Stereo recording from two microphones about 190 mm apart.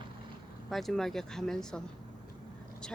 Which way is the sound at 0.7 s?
Centre (ahead or behind).